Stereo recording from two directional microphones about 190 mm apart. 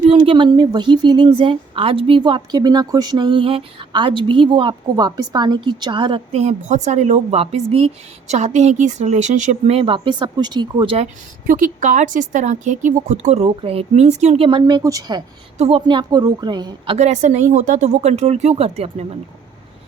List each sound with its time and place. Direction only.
0.1 s a woman's voice: 25° right (ahead or behind)
11.4 s a woman's voice: 45° right (ahead or behind); by 15.2 s 20° right (ahead or behind)
15.5 s a woman's voice: 30° right (ahead or behind)